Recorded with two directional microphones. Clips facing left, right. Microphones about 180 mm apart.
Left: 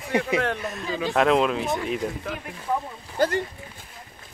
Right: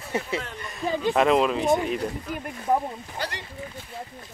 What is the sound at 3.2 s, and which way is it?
Speech, 50° left (ahead or behind).